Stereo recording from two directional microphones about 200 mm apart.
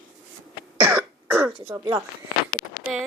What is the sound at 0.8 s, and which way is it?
Cough, 10° right (ahead or behind).